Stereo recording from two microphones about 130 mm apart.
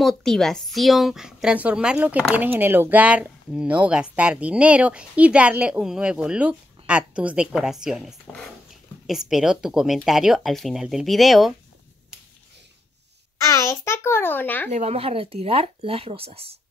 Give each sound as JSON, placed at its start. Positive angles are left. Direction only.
{"t": 0.0, "sound": "speech", "side_deg": 5}
{"t": 13.5, "sound": "a child's voice", "side_deg": 25}
{"t": 14.7, "sound": "speech", "side_deg": -55}